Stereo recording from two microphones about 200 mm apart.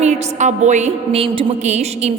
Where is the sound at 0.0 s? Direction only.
35° right (ahead or behind).